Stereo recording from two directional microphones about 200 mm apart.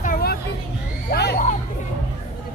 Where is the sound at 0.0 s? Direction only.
45° left (ahead or behind).